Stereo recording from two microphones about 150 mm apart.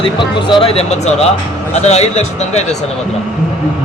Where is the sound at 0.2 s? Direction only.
35° left (ahead or behind).